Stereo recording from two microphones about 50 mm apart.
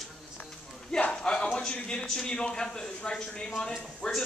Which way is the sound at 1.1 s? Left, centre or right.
Centre.